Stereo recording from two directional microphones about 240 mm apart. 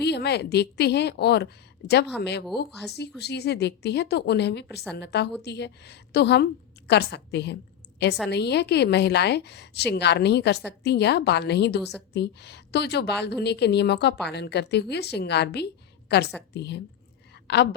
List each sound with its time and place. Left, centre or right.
0.0 s a woman's voice: left